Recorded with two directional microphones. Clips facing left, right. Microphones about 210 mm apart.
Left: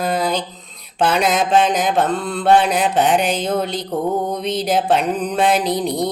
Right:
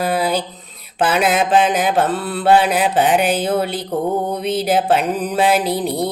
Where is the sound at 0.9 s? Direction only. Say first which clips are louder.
Right 1 dB; 5° right (ahead or behind).